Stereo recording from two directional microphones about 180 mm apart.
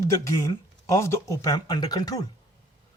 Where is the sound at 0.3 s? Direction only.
15° left (ahead or behind).